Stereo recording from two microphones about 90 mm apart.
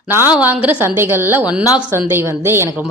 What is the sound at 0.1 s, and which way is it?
A woman's voice, 20° right (ahead or behind).